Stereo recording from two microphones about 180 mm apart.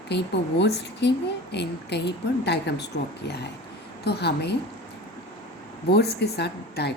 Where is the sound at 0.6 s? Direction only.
70° left (ahead or behind).